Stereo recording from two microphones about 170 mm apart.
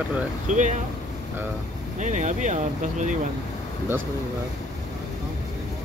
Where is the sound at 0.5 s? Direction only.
45° right (ahead or behind).